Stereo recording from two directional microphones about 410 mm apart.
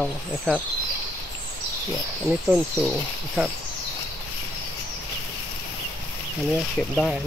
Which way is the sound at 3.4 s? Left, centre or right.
Centre.